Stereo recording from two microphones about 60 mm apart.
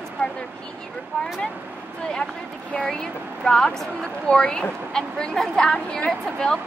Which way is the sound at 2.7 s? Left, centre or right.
Centre.